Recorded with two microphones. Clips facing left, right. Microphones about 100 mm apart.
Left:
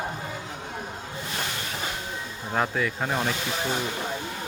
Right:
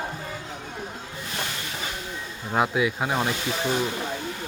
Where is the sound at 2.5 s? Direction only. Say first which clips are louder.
Right 3 dB; 10° right (ahead or behind).